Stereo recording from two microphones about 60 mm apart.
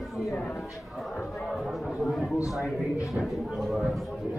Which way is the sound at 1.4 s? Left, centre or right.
Centre.